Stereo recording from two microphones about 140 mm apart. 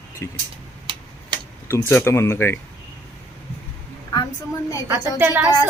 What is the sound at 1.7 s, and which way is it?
Speech, 15° left (ahead or behind).